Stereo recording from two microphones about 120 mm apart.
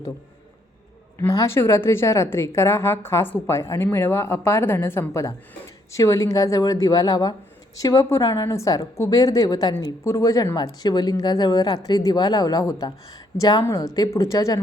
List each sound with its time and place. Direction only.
1.3 s a woman's voice: 25° left (ahead or behind)
13.7 s a woman's voice: 25° left (ahead or behind)